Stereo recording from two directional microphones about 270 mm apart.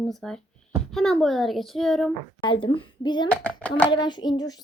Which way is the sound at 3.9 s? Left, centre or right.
Centre.